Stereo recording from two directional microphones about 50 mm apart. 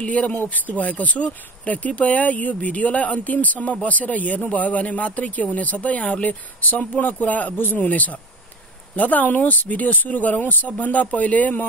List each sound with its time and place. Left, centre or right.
0.0 s speech: left
0.3 s speech: left